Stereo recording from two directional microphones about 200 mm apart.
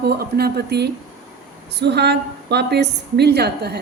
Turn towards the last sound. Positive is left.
turn(degrees=-55)  # may be behind; listen again after turning